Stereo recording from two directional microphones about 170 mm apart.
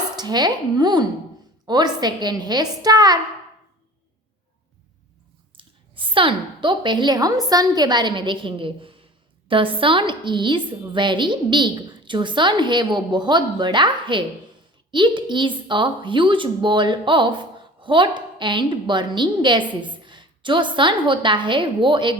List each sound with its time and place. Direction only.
0.2 s a woman's voice: 25° right (ahead or behind)
5.5 s a woman's voice: 30° right (ahead or behind)